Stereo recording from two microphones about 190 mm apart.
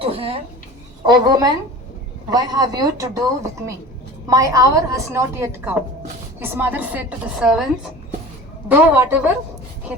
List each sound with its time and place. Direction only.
0.0 s speech: 30° right (ahead or behind)
4.3 s a woman's voice: 20° right (ahead or behind)
8.7 s a woman's voice: 10° right (ahead or behind)